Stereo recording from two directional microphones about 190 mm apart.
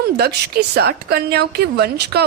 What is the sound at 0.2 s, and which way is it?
A woman's voice, 55° right (ahead or behind).